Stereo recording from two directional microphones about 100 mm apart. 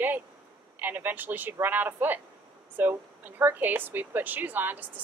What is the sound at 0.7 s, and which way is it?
Speech, 20° right (ahead or behind).